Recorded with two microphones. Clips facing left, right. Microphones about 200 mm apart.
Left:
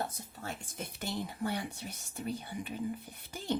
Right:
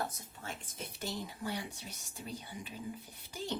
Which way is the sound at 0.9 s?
55° left (ahead or behind).